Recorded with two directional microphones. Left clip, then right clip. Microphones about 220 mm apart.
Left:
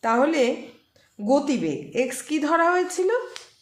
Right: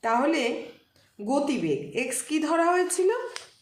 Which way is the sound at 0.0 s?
50° left (ahead or behind).